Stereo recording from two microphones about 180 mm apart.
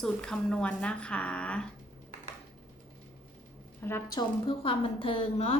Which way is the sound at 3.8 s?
15° left (ahead or behind).